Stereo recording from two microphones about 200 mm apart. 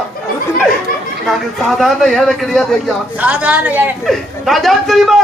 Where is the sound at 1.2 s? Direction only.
Centre (ahead or behind).